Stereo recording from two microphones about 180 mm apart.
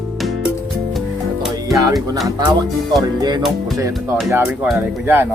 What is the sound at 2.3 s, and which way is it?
Speech, 20° right (ahead or behind).